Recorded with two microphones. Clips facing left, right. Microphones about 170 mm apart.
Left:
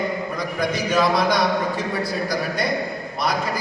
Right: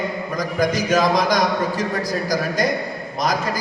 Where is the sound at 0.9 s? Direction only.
40° right (ahead or behind).